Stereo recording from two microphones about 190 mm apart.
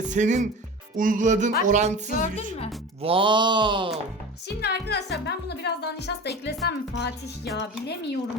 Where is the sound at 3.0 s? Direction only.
25° right (ahead or behind).